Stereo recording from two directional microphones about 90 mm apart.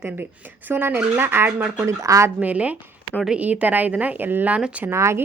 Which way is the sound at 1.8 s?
35° right (ahead or behind).